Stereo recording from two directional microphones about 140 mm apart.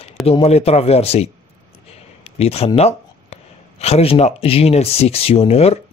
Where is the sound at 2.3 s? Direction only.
45° left (ahead or behind).